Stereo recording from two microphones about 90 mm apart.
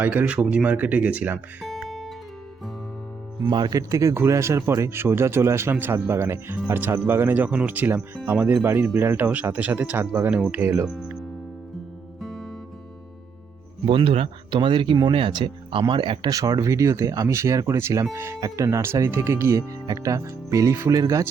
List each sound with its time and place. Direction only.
0.0 s speech: 20° right (ahead or behind)
1.7 s guitar: 5° left (ahead or behind)
3.5 s speech: 55° right (ahead or behind)
3.8 s speech: 35° right (ahead or behind)
12.2 s music: 5° left (ahead or behind)
13.8 s speech: 85° right; by 16.3 s 65° right (ahead or behind)
16.3 s speech: 40° right (ahead or behind)
18.3 s speech: 40° right (ahead or behind)